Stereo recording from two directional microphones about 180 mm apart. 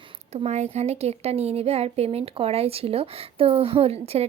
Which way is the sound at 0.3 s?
35° right (ahead or behind).